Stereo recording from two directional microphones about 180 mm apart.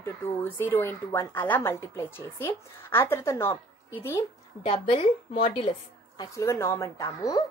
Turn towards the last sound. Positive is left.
turn(degrees=20)  # may be behind; listen again after turning